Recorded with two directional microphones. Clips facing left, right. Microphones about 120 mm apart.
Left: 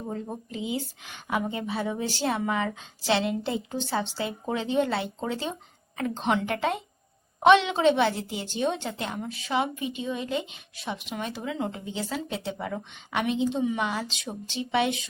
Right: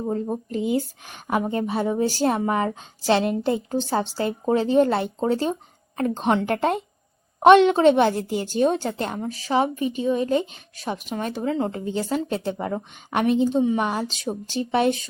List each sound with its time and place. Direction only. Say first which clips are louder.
0.1 s a woman's voice: right 9 dB; 40° right (ahead or behind)